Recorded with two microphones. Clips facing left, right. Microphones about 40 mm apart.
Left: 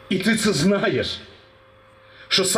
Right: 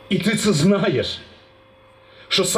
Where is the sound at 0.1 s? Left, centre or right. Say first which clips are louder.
Right 1 dB; right.